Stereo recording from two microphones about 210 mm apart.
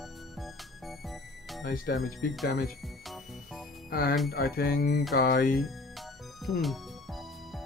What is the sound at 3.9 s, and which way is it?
Music, 45° left (ahead or behind).